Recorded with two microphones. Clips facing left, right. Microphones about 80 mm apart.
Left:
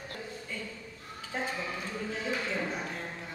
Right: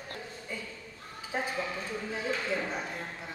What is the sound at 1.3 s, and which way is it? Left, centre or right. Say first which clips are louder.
Speech: right 2 dB; centre.